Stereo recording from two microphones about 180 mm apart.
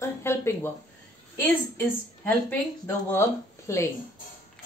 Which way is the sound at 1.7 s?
10° left (ahead or behind).